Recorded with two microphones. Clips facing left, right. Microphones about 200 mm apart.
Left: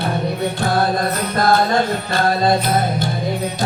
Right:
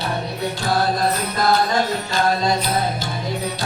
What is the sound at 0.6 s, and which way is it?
Music, 55° left (ahead or behind).